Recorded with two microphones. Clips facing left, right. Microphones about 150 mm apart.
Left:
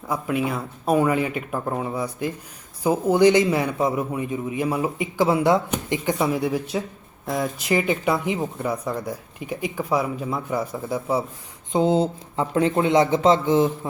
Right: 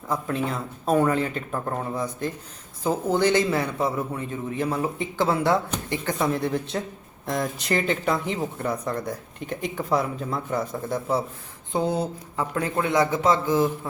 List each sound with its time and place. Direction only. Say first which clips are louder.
0.1 s a man's voice: left 2 dB; 10° left (ahead or behind)
11.7 s speech: left 5 dB; 20° left (ahead or behind)